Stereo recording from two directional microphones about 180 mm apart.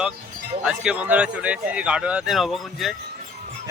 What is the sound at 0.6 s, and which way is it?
Speech, 5° right (ahead or behind).